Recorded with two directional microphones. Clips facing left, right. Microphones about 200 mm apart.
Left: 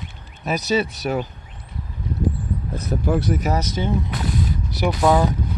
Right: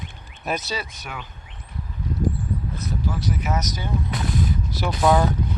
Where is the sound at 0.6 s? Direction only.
25° left (ahead or behind).